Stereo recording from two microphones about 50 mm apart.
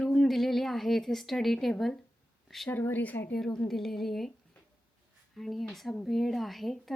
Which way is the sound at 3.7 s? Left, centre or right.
Centre.